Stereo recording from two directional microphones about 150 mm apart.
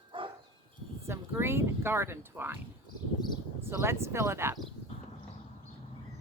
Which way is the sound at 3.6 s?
15° right (ahead or behind).